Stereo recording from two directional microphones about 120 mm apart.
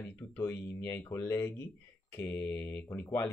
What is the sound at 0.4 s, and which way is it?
Speech, 20° left (ahead or behind).